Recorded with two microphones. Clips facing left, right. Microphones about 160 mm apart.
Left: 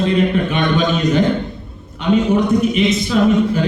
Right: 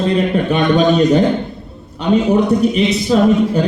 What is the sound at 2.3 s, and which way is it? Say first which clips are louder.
A man's voice: right 2 dB; 35° right (ahead or behind).